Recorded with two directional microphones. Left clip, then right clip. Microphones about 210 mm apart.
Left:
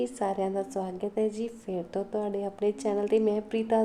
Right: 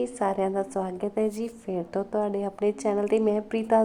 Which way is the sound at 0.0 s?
15° right (ahead or behind).